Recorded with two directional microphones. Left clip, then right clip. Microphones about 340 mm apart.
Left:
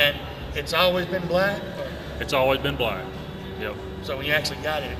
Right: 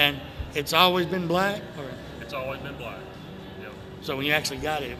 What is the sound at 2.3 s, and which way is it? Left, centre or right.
Speech, left.